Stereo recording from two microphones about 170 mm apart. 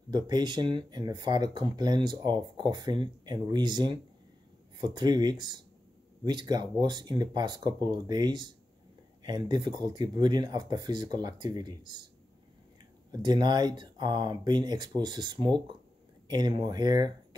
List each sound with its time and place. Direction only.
0.1 s speech: 25° right (ahead or behind)
13.1 s speech: 25° right (ahead or behind)